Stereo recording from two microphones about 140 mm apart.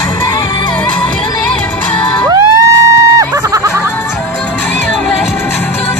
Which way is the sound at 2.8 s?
25° right (ahead or behind).